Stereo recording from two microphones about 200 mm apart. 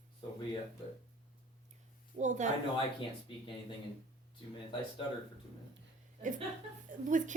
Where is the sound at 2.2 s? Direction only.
35° right (ahead or behind).